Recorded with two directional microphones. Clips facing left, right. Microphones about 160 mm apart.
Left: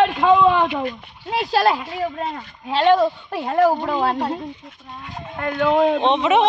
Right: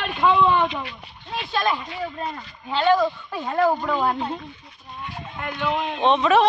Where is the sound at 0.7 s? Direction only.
45° left (ahead or behind).